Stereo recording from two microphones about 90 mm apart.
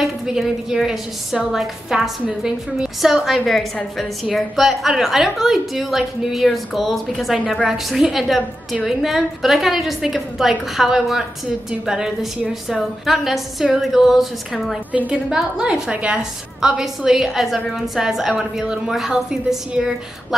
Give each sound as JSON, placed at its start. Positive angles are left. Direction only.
{"t": 0.0, "sound": "a woman's voice", "side_deg": -5}
{"t": 14.9, "sound": "a woman's voice", "side_deg": -15}
{"t": 15.2, "sound": "a woman's voice", "side_deg": -5}